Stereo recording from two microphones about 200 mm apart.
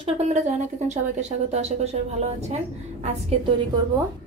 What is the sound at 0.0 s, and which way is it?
A woman's voice, 35° right (ahead or behind).